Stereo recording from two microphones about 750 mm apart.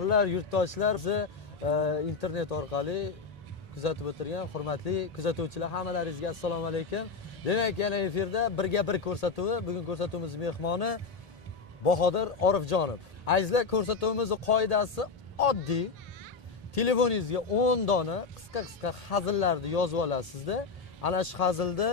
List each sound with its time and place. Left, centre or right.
0.1 s speech: left